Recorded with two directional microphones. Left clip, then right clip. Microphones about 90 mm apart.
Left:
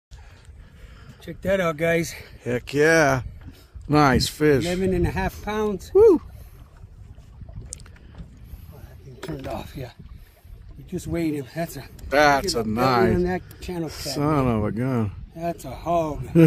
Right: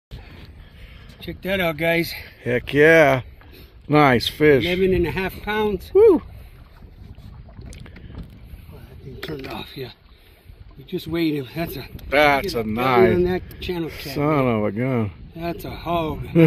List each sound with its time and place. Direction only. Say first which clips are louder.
1.2 s speech: even; 65° left (ahead or behind)
2.4 s speech: right 5 dB; 15° left (ahead or behind)
4.9 s speech: right 3 dB; 35° left (ahead or behind)
5.9 s speech: right 1 dB; 15° left (ahead or behind)
10.9 s speech: right 4 dB; 50° left (ahead or behind)
12.1 s speech: right 1 dB; 15° left (ahead or behind)
13.2 s speech: right 4 dB; 50° left (ahead or behind)
13.8 s speech: right 1 dB; 15° left (ahead or behind)
15.3 s speech: even; 50° left (ahead or behind)